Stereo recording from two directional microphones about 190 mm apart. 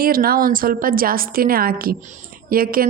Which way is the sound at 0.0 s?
50° right (ahead or behind).